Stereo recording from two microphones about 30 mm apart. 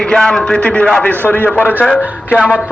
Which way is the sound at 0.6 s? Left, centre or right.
Left.